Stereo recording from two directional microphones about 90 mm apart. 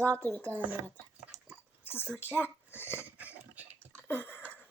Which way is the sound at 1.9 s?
25° left (ahead or behind).